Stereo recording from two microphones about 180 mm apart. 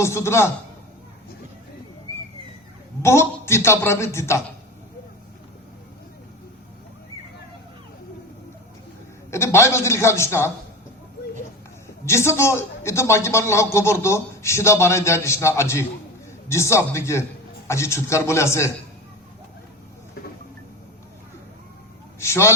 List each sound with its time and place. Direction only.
0.0 s a man's voice: 15° left (ahead or behind)
3.0 s a man's voice: 15° left (ahead or behind)
9.3 s a man's voice: 15° left (ahead or behind)
12.0 s a man's voice: 15° left (ahead or behind)
22.2 s a man's voice: 15° left (ahead or behind)